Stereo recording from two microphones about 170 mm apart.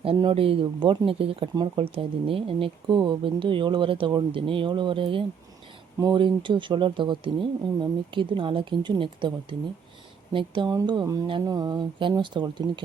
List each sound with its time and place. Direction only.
0.0 s speech: 30° right (ahead or behind)